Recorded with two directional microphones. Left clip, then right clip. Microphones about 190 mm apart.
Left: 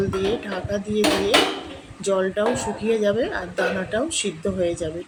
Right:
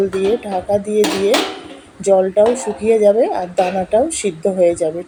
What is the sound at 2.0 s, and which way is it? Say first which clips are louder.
Speech: right 10 dB; 5° right (ahead or behind).